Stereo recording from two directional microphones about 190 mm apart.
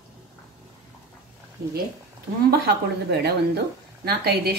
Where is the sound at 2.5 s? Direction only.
55° right (ahead or behind).